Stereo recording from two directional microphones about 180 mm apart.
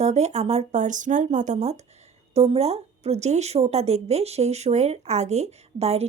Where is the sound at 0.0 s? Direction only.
40° right (ahead or behind).